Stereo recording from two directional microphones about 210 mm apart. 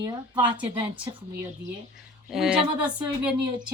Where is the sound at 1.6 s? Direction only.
55° right (ahead or behind).